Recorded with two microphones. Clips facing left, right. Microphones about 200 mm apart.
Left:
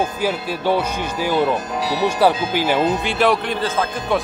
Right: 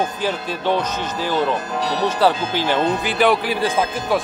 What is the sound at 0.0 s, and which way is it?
Speech, 10° left (ahead or behind).